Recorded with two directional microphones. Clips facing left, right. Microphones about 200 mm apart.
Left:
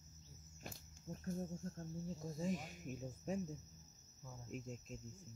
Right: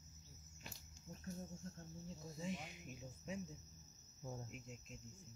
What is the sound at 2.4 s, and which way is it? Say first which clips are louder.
Speech: left 4 dB; 45° left (ahead or behind).